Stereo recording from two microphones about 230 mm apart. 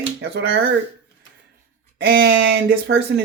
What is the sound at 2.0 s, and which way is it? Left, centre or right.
Speech, right.